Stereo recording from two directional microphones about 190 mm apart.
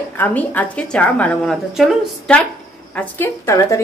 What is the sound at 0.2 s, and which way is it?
A woman's voice, 10° left (ahead or behind).